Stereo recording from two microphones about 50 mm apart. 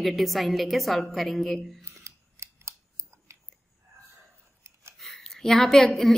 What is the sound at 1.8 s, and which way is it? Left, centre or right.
Scissors, right.